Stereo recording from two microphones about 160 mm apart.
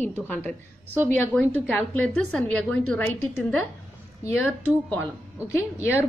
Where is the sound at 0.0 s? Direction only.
10° left (ahead or behind).